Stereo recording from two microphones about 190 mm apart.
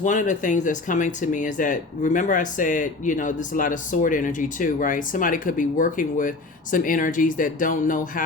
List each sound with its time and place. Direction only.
0.0 s speech: 40° left (ahead or behind)